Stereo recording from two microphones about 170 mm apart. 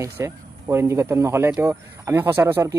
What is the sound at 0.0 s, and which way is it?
Speech, 15° right (ahead or behind).